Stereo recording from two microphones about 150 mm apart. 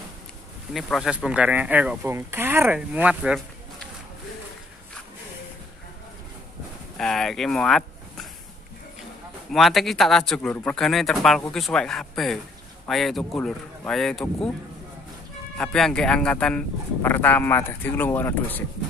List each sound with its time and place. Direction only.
0.7 s speech: centre (ahead or behind)
7.0 s speech: centre (ahead or behind)
9.5 s speech: centre (ahead or behind)
15.5 s speech: 5° left (ahead or behind)